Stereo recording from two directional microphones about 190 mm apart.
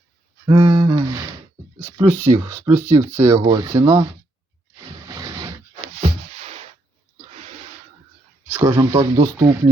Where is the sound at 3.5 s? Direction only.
30° right (ahead or behind).